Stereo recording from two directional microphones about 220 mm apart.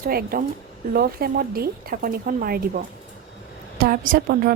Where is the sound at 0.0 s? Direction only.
40° right (ahead or behind).